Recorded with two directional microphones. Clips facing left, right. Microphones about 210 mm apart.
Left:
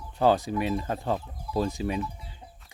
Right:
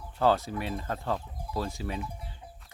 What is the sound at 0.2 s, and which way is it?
Speech, 15° left (ahead or behind).